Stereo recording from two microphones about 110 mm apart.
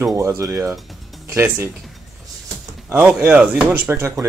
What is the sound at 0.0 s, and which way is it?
Speech, 25° right (ahead or behind).